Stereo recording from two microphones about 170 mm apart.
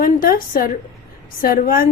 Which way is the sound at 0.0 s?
55° left (ahead or behind).